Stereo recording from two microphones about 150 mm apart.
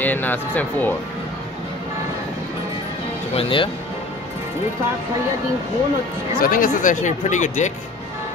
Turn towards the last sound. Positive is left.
turn(degrees=55)  # may be behind; listen again after turning